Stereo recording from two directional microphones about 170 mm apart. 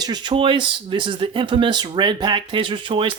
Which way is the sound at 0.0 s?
25° right (ahead or behind).